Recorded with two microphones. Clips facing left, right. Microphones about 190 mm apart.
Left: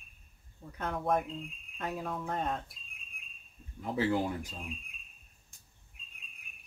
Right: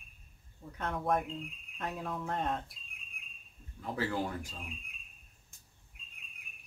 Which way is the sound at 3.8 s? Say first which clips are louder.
Left 4 dB; 20° left (ahead or behind).